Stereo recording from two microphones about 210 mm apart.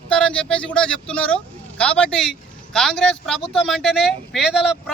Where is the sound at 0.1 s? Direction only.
5° left (ahead or behind).